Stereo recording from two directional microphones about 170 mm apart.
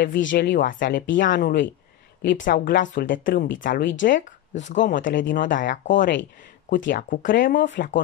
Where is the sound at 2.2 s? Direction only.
90° left.